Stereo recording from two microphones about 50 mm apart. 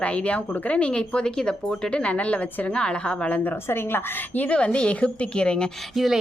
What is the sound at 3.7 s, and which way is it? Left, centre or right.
Speech, left.